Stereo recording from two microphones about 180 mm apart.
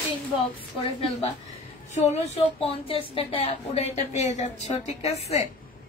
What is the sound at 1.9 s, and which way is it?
Speech, 35° left (ahead or behind).